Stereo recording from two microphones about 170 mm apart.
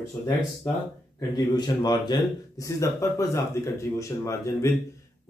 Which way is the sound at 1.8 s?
25° left (ahead or behind).